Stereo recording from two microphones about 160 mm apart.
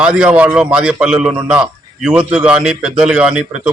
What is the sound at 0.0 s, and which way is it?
A man's voice, 5° right (ahead or behind).